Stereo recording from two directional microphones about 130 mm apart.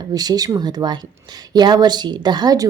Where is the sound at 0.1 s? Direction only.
30° right (ahead or behind).